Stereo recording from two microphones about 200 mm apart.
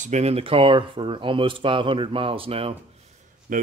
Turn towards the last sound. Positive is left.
turn(degrees=-40)  # may be behind; listen again after turning